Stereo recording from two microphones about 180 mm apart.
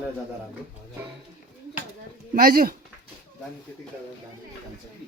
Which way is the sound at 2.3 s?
55° right (ahead or behind).